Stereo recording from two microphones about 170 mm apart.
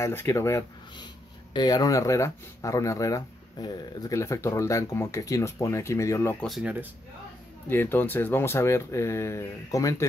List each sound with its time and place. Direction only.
0.0 s speech: 15° left (ahead or behind)
6.4 s speech: centre (ahead or behind)
7.6 s speech: 10° left (ahead or behind)